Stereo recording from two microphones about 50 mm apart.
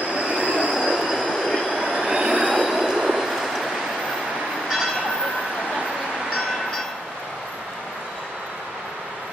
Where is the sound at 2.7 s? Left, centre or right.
Centre.